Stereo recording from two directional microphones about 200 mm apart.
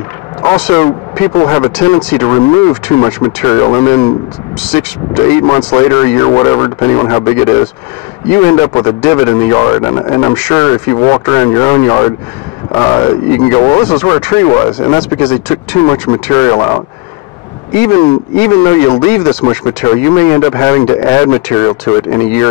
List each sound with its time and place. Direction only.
0.7 s speech: 15° left (ahead or behind)
17.9 s speech: 15° left (ahead or behind)